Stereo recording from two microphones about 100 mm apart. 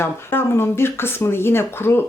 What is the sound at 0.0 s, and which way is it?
Speech, 25° left (ahead or behind).